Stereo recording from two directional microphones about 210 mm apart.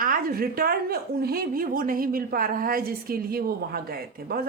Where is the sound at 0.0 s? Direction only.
45° right (ahead or behind).